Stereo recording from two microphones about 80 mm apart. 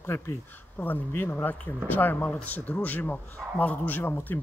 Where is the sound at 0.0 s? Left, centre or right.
Left.